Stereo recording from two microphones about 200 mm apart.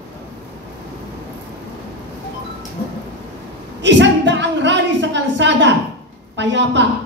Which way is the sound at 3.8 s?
65° right (ahead or behind).